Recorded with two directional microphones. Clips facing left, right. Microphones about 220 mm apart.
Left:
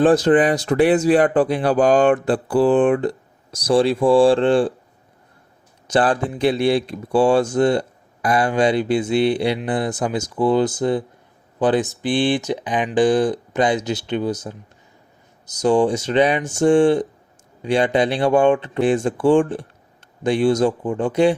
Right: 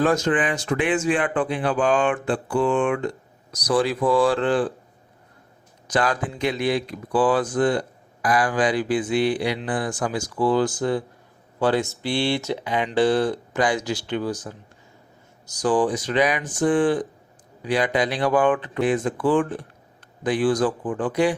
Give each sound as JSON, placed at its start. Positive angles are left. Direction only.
{"t": 0.0, "sound": "speech", "side_deg": 30}
{"t": 5.9, "sound": "speech", "side_deg": 30}